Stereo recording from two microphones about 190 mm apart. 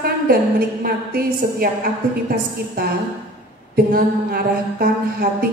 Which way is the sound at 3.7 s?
50° right (ahead or behind).